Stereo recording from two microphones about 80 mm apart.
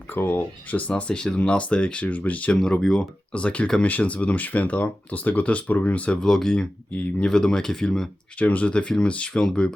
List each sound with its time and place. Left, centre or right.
0.1 s speech: left
2.5 s speech: centre
8.4 s speech: centre